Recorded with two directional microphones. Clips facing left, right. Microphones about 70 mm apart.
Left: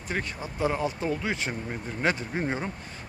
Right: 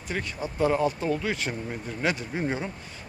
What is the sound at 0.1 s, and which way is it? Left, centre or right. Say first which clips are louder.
Speech: right 2 dB; left.